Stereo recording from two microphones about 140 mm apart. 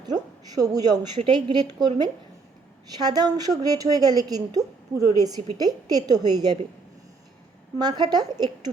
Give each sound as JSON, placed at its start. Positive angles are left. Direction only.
{"t": 0.0, "sound": "a woman's voice", "side_deg": -30}
{"t": 3.0, "sound": "a woman's voice", "side_deg": -30}
{"t": 7.8, "sound": "a woman's voice", "side_deg": -30}